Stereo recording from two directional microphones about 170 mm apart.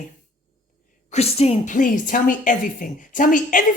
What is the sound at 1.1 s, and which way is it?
A woman's voice, 35° left (ahead or behind).